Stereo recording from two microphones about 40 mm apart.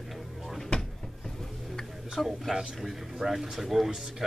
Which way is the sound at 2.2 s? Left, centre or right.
Centre.